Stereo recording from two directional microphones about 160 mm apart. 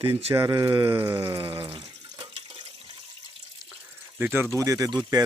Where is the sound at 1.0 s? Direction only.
30° right (ahead or behind).